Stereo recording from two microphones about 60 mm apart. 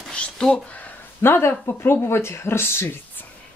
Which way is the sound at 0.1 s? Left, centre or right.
Centre.